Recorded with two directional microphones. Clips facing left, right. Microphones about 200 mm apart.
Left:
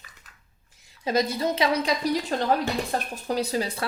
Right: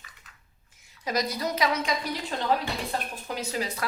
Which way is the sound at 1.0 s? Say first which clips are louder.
Left 5 dB; 25° left (ahead or behind).